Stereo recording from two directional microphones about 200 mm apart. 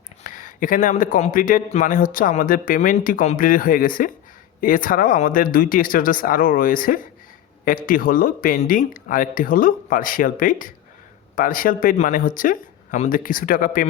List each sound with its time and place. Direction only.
0.2 s a man's voice: 40° left (ahead or behind)